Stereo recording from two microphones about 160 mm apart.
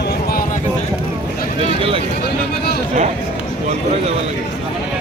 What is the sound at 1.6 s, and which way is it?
Speech, 35° right (ahead or behind).